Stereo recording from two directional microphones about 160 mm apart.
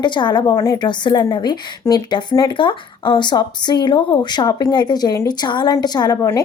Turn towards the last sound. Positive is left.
turn(degrees=20)  # may be behind; listen again after turning